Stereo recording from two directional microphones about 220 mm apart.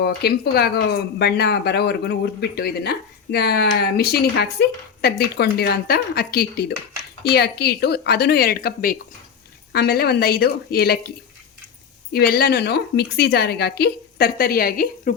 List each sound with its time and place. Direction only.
0.0 s speech: 45° left (ahead or behind)
12.1 s speech: 45° left (ahead or behind)